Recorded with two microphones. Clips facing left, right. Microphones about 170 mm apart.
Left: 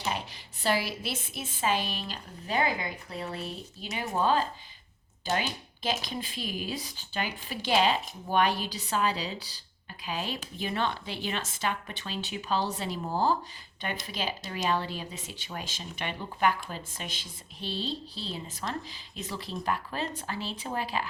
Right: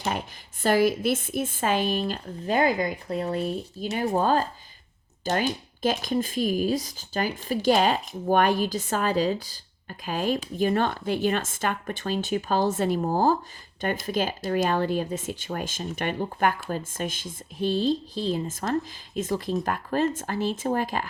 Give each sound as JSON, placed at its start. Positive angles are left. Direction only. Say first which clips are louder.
{"t": 0.6, "sound": "speech", "louder": "right 8 dB", "side_deg": -50}